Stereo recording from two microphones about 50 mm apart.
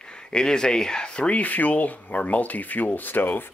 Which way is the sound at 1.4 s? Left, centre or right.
Left.